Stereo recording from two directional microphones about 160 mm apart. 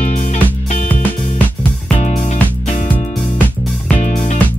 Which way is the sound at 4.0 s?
45° left (ahead or behind).